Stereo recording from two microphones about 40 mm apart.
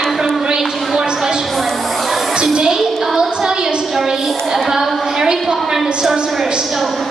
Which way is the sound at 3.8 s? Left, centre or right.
Centre.